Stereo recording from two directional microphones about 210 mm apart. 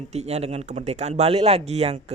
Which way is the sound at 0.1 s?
30° right (ahead or behind).